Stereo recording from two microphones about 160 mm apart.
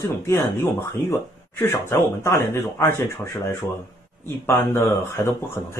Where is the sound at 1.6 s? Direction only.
15° left (ahead or behind).